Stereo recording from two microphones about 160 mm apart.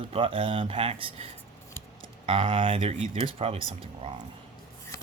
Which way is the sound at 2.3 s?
30° right (ahead or behind).